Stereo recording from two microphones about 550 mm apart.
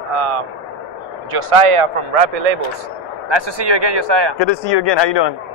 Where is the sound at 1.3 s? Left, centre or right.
Right.